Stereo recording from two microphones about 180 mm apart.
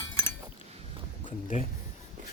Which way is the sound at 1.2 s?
45° left (ahead or behind).